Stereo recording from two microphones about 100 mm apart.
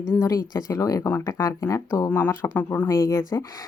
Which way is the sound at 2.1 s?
20° left (ahead or behind).